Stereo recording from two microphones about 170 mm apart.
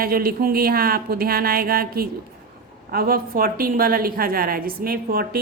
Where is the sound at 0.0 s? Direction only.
60° right (ahead or behind).